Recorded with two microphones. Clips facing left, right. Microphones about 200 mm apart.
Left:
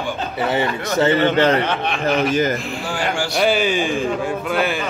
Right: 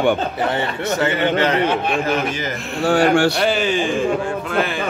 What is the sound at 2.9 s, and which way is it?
Speech, 65° right (ahead or behind).